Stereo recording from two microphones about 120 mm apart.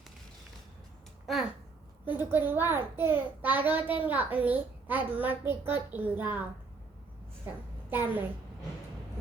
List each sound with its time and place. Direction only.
2.0 s a child's voice: 15° right (ahead or behind)
7.9 s a child's voice: 15° right (ahead or behind)